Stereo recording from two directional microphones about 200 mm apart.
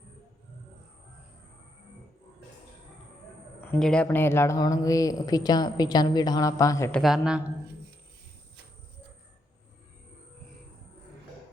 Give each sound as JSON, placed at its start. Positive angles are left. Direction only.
{"t": 3.6, "sound": "speech", "side_deg": 5}
{"t": 7.0, "sound": "a woman's voice", "side_deg": -5}